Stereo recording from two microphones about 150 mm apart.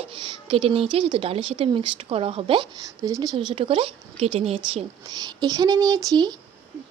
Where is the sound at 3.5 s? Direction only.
35° right (ahead or behind).